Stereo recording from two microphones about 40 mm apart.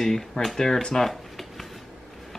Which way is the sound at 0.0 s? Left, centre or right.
Centre.